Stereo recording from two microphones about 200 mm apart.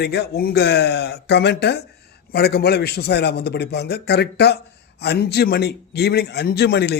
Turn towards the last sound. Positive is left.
turn(degrees=55)  # may be behind; listen again after turning